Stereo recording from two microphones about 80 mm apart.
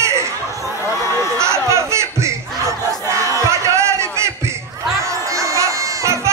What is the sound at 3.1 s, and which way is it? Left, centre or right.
Battle cry, right.